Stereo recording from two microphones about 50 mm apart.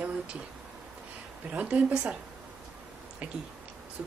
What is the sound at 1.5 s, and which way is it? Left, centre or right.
Speech, right.